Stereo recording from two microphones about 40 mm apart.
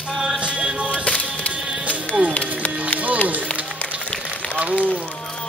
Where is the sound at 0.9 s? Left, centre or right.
Left.